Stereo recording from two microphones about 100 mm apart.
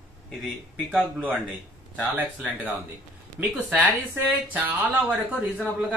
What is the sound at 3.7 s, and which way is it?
Speech, 20° right (ahead or behind).